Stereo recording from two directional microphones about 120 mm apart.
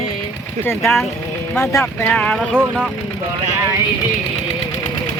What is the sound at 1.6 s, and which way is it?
Speech, 20° left (ahead or behind).